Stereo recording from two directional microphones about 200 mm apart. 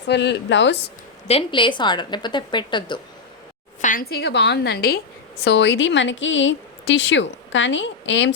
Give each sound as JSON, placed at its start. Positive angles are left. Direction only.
{"t": 0.1, "sound": "a woman's voice", "side_deg": 60}
{"t": 1.3, "sound": "a woman's voice", "side_deg": 25}
{"t": 3.8, "sound": "a woman's voice", "side_deg": 40}